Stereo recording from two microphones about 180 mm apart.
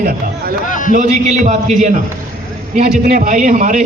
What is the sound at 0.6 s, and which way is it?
Speech, 45° left (ahead or behind).